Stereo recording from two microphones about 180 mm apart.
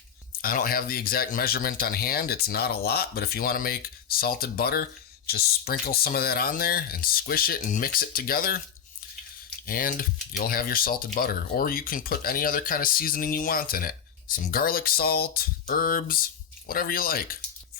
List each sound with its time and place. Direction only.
0.4 s speech: 55° left (ahead or behind)
9.6 s speech: 55° left (ahead or behind)